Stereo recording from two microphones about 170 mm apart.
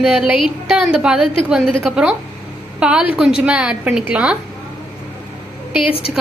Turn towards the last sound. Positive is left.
turn(degrees=35)  # may be behind; listen again after turning